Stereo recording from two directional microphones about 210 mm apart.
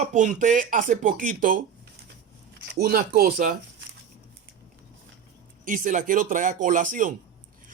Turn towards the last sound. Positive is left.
turn(degrees=-40)  # may be behind; listen again after turning